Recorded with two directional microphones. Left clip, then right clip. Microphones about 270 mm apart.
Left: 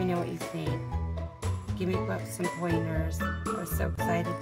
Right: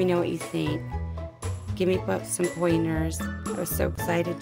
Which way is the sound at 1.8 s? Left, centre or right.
Right.